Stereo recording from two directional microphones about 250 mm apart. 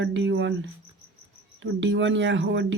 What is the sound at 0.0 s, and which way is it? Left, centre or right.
Speech, right.